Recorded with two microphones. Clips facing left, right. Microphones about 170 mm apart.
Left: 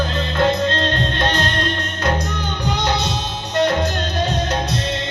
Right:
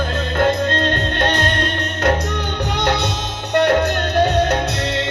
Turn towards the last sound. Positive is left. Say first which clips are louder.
# right 6 dB
turn(degrees=-60)  # may be behind; listen again after turning